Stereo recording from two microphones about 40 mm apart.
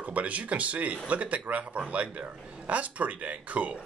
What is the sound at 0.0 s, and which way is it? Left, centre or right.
Speech, right.